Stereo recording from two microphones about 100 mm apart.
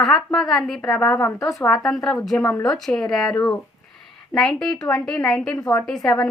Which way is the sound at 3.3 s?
15° left (ahead or behind).